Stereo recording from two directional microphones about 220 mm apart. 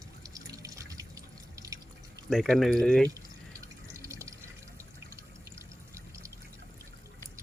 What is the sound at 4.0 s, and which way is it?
Fill, 15° right (ahead or behind).